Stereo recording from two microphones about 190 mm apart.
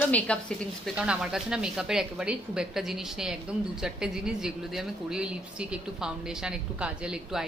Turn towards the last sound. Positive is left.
turn(degrees=-5)  # may be behind; listen again after turning